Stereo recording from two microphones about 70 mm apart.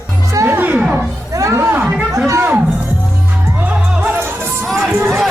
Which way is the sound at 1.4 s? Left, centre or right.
Right.